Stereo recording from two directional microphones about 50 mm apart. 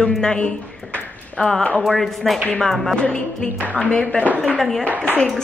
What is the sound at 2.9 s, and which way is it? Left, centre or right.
Speech, centre.